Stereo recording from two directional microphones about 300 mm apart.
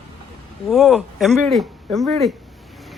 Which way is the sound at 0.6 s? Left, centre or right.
Centre.